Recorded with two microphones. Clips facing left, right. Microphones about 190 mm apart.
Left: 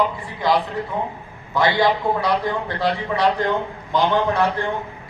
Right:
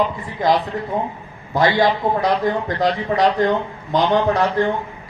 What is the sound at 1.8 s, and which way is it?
A man's voice, 45° right (ahead or behind).